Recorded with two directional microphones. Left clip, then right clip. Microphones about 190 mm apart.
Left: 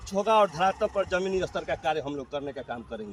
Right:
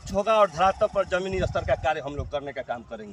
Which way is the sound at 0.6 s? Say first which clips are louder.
Right 3 dB; 25° right (ahead or behind).